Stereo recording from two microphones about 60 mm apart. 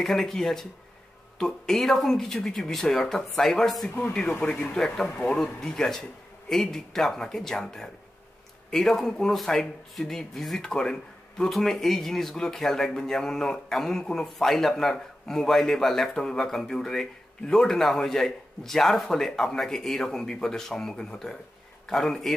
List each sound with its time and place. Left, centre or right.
0.0 s speech: centre
4.1 s speech: centre